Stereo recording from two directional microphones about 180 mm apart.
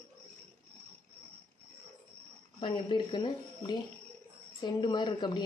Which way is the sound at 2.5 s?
25° left (ahead or behind).